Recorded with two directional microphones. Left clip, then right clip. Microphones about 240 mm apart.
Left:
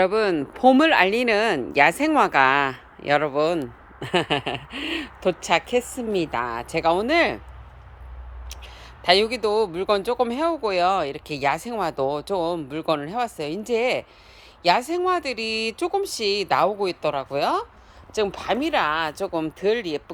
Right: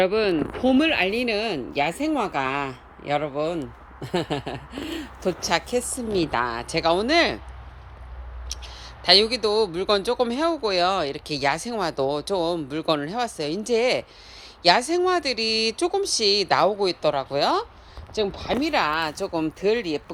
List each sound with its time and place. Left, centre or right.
0.0 s speech: centre
8.6 s speech: centre